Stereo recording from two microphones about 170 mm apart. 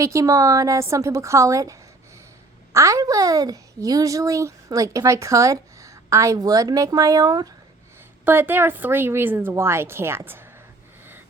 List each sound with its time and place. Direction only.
0.0 s a woman's voice: 20° right (ahead or behind)